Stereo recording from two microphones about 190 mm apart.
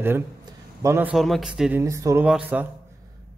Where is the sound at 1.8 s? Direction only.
15° right (ahead or behind).